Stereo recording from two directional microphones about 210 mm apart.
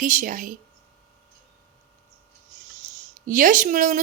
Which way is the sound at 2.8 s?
40° right (ahead or behind).